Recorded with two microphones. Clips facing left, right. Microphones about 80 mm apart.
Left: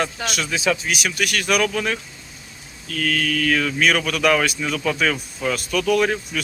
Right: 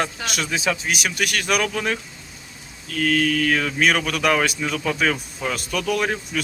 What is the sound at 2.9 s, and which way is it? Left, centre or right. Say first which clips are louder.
Mantra: right 2 dB; right.